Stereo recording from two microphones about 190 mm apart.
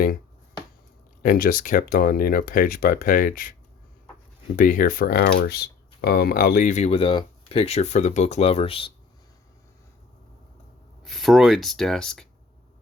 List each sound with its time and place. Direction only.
1.2 s speech: 45° left (ahead or behind)
4.5 s speech: 45° left (ahead or behind); by 8.9 s 30° left (ahead or behind)
11.0 s speech: centre (ahead or behind)